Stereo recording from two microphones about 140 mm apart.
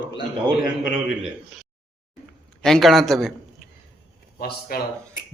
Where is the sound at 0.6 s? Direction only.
Centre (ahead or behind).